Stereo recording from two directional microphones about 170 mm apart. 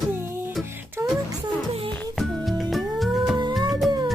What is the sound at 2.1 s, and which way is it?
Music, centre (ahead or behind).